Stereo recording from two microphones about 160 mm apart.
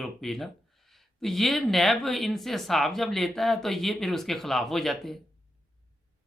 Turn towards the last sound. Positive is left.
turn(degrees=0)  # may be behind; listen again after turning